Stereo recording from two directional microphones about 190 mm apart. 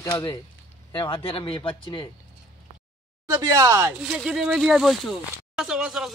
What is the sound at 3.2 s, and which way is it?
Speech, 15° right (ahead or behind).